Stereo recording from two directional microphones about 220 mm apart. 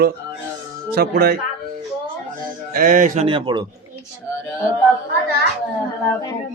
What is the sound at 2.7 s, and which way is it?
Speech, 40° right (ahead or behind).